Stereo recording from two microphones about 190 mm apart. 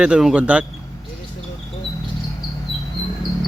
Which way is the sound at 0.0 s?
5° right (ahead or behind).